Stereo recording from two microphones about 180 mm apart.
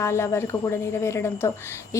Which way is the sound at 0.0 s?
15° left (ahead or behind).